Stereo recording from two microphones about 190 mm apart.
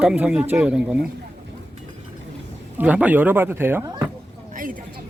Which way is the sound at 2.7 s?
5° right (ahead or behind).